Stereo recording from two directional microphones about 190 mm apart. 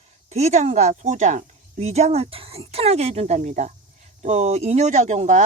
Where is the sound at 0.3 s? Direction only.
35° right (ahead or behind).